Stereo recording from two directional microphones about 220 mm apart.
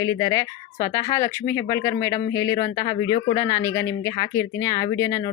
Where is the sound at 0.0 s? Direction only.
15° left (ahead or behind).